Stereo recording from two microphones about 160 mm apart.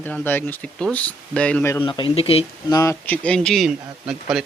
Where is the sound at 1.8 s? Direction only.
30° left (ahead or behind).